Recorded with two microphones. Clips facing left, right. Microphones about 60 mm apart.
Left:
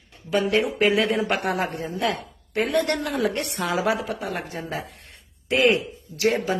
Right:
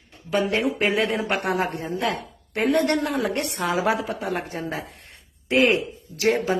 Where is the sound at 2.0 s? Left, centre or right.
Right.